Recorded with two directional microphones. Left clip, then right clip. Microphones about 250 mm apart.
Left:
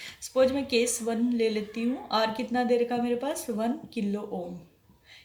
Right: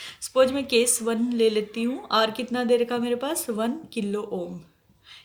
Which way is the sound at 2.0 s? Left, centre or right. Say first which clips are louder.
Right 5 dB; right.